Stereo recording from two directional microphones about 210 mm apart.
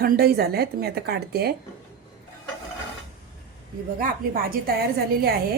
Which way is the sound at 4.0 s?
45° right (ahead or behind).